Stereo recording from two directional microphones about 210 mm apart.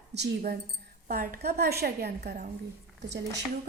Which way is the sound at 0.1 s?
55° right (ahead or behind).